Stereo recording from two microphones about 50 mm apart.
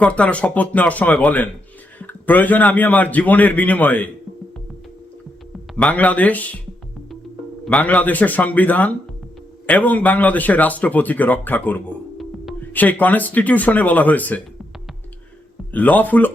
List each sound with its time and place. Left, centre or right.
0.0 s a man's voice: left
5.7 s a man's voice: left
7.7 s a man's voice: left
12.1 s music: centre
12.7 s a man's voice: left
15.7 s a man's voice: left